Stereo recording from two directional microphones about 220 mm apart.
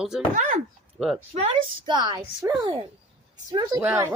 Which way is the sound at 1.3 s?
25° right (ahead or behind).